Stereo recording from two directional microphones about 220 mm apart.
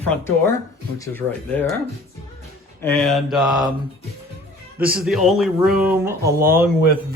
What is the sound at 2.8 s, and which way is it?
Mantra, 5° left (ahead or behind).